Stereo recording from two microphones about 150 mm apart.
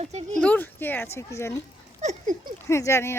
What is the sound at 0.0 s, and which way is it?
Speech, 45° right (ahead or behind).